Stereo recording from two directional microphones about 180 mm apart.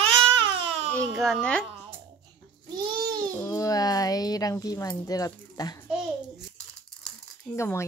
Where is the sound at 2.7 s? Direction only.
25° right (ahead or behind).